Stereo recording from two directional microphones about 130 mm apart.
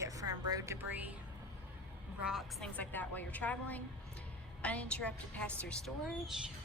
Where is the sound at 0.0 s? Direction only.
25° right (ahead or behind).